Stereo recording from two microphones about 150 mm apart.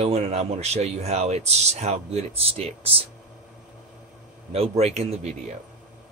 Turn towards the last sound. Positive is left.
turn(degrees=-45)  # may be behind; listen again after turning